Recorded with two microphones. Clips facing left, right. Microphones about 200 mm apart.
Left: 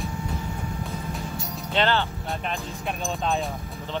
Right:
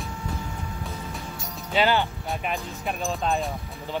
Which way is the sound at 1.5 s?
10° right (ahead or behind).